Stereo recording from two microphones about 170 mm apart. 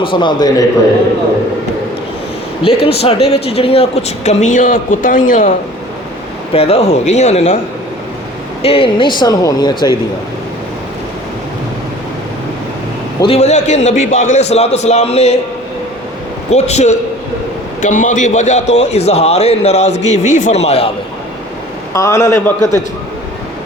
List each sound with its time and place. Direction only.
0.0 s speech: 30° left (ahead or behind)
2.6 s speech: 35° left (ahead or behind); by 5.5 s 50° left (ahead or behind)
6.5 s speech: 35° left (ahead or behind)
8.6 s speech: 30° left (ahead or behind)
13.2 s speech: 40° left (ahead or behind)
16.5 s a man's voice: 40° left (ahead or behind)
21.9 s a man's voice: 20° left (ahead or behind)